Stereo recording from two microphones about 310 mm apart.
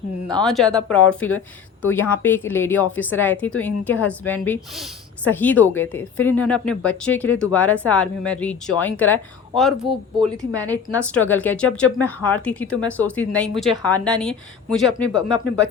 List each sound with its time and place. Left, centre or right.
0.4 s a woman's voice: centre
9.8 s a woman's voice: centre
11.1 s a woman's voice: centre